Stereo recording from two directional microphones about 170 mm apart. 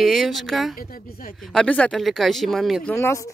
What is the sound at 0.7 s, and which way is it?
Speech, 60° left (ahead or behind).